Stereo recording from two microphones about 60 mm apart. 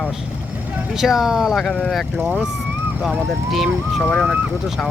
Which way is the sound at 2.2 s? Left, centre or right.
Right.